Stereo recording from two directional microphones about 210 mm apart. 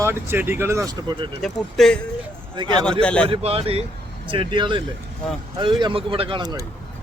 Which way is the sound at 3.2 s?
25° right (ahead or behind).